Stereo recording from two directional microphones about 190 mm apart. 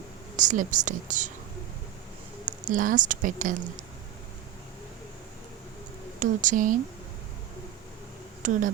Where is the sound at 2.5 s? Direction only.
45° right (ahead or behind).